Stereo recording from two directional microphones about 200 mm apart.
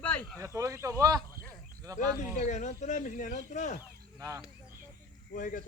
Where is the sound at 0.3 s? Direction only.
15° right (ahead or behind).